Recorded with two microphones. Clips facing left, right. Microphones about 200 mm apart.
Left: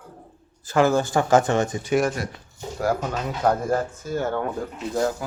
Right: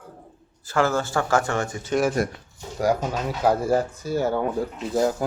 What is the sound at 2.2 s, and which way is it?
Speech, 50° right (ahead or behind).